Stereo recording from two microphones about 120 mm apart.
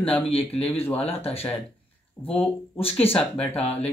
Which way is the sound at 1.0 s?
55° left (ahead or behind).